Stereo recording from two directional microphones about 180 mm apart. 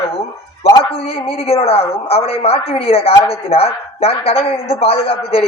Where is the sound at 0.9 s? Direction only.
35° left (ahead or behind).